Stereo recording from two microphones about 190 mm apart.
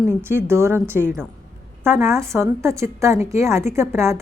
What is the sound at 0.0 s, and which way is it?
A woman's voice, 10° right (ahead or behind).